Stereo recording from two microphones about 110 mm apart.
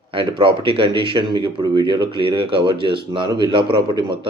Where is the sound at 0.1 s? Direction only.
50° right (ahead or behind).